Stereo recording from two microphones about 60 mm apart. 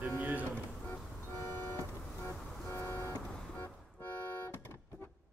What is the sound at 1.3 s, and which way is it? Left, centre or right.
Vehicle, left.